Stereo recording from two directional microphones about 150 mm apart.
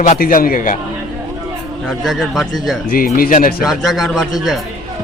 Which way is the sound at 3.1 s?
70° left (ahead or behind).